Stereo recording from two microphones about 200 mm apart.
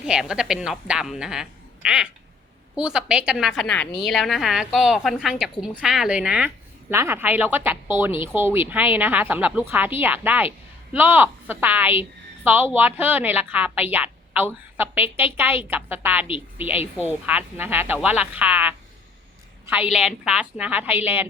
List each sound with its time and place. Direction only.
0.0 s a woman's voice: 5° right (ahead or behind)
16.7 s a woman's voice: 30° left (ahead or behind)
17.1 s a woman's voice: 10° right (ahead or behind)